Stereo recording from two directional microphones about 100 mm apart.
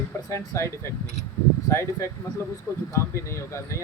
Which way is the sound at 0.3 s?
30° left (ahead or behind).